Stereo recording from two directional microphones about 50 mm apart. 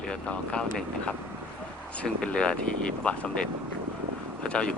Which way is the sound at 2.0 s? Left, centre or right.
Centre.